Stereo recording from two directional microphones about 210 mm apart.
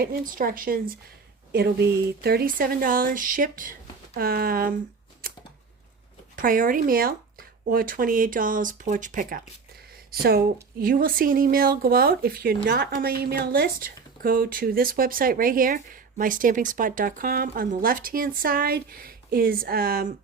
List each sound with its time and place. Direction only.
0.0 s speech: 40° right (ahead or behind)
6.3 s speech: 40° right (ahead or behind)
10.1 s speech: 50° right (ahead or behind)